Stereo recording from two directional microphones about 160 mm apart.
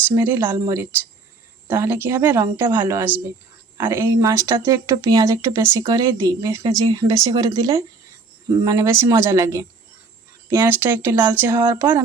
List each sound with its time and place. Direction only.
0.1 s speech: 15° right (ahead or behind)